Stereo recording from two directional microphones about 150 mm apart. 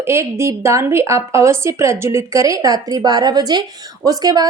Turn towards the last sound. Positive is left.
turn(degrees=-25)  # may be behind; listen again after turning